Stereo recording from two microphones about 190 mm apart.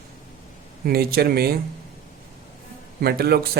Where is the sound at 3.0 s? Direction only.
55° right (ahead or behind).